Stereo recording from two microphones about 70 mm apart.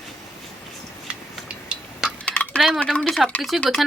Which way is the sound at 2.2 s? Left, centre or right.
Centre.